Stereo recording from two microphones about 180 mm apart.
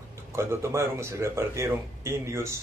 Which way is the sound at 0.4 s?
15° right (ahead or behind).